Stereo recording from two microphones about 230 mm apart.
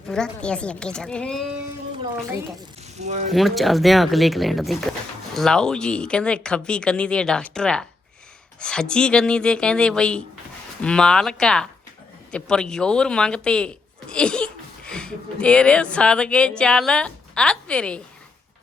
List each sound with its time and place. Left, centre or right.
0.1 s speech: centre
3.0 s speech: right
3.2 s speech: centre